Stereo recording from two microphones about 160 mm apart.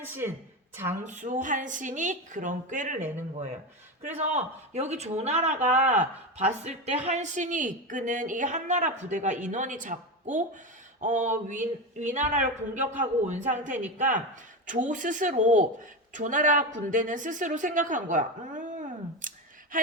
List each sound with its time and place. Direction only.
0.0 s speech: 15° right (ahead or behind)
1.0 s speech: 50° right (ahead or behind)
19.7 s a sound: 60° right (ahead or behind)